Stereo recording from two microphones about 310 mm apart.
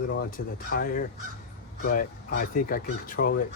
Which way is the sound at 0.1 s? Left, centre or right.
Left.